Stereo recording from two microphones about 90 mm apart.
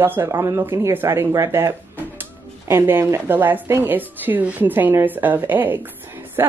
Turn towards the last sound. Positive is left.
turn(degrees=-25)  # may be behind; listen again after turning